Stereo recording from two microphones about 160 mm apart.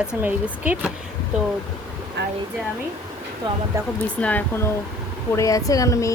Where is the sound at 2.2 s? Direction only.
90° right.